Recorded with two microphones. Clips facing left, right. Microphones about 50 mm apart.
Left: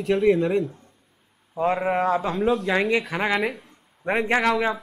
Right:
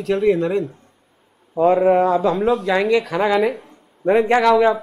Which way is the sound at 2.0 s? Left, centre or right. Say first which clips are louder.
Right 6 dB; left.